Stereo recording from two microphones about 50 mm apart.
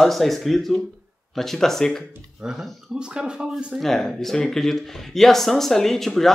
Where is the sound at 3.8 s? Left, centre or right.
Centre.